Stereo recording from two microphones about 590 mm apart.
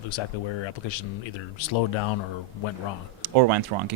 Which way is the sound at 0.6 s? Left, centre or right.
Left.